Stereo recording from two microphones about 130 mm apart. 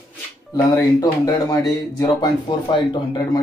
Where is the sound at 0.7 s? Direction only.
25° left (ahead or behind).